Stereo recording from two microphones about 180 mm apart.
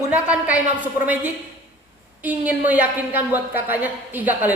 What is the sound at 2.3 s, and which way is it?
A woman's voice, 10° right (ahead or behind).